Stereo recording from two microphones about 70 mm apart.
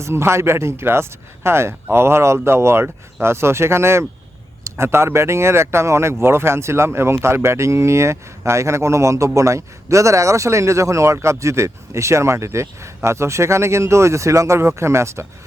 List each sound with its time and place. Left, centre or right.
0.0 s speech: right